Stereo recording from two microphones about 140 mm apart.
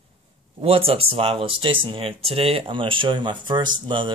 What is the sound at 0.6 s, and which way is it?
Speech, 40° right (ahead or behind).